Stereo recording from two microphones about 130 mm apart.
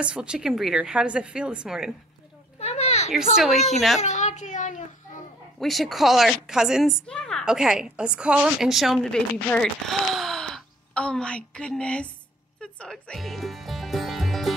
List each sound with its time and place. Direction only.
0.0 s speech: 10° right (ahead or behind)
2.6 s a sound: 55° left (ahead or behind)
3.3 s a woman's voice: centre (ahead or behind)
4.0 s child singing: 65° left (ahead or behind)
5.6 s a woman's voice: centre (ahead or behind)
7.4 s a woman's voice: 5° right (ahead or behind)
12.5 s music: 5° left (ahead or behind)